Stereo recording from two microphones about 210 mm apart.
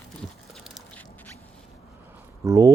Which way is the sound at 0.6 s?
Centre (ahead or behind).